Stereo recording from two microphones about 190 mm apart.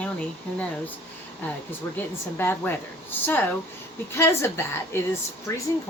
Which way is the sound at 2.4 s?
10° left (ahead or behind).